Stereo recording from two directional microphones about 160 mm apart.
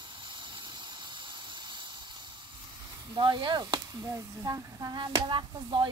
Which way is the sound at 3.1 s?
30° right (ahead or behind).